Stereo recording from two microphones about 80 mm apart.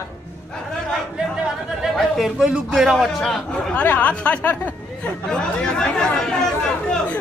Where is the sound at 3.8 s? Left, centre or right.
Centre.